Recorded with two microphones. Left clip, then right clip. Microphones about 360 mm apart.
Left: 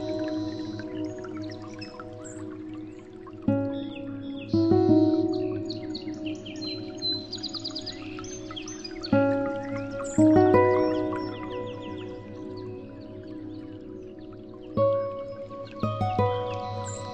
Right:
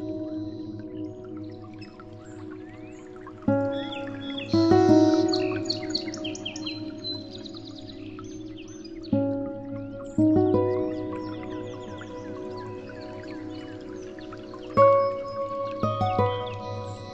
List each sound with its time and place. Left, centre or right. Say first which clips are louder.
0.2 s music: left 3 dB; left
3.4 s music: right 3 dB; centre
4.3 s music: right 3 dB; right
5.5 s chirp: right 4 dB; right
9.1 s music: left 4 dB; left
10.9 s music: left 4 dB; centre
11.2 s music: left 1 dB; centre
14.7 s music: right 6 dB; centre
15.7 s music: right 1 dB; centre